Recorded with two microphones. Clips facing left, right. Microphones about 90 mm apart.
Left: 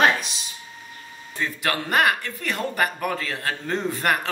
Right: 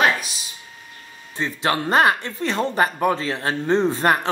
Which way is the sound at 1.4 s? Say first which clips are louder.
Right 4 dB; 25° right (ahead or behind).